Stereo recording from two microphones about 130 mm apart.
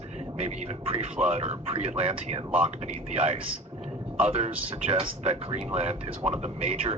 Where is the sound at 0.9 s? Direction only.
50° right (ahead or behind).